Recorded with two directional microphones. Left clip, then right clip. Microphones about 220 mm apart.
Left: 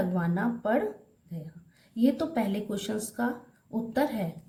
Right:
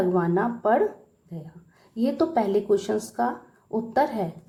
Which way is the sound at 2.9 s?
10° right (ahead or behind).